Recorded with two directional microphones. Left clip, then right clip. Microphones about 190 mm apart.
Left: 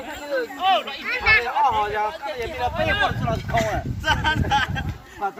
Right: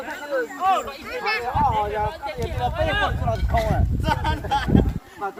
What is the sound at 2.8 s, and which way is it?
Speech, 55° left (ahead or behind).